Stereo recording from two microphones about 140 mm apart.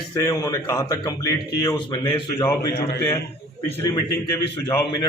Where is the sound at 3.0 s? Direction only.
15° left (ahead or behind).